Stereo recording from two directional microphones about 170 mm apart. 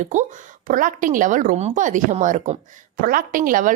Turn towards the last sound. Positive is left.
turn(degrees=-50)  # may be behind; listen again after turning